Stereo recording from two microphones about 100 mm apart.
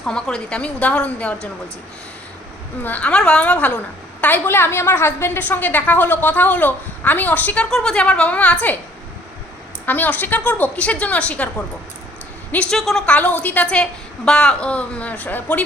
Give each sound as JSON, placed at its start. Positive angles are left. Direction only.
{"t": 0.0, "sound": "a woman's voice", "side_deg": 10}
{"t": 2.8, "sound": "a woman's voice", "side_deg": 15}
{"t": 9.8, "sound": "a woman's voice", "side_deg": 15}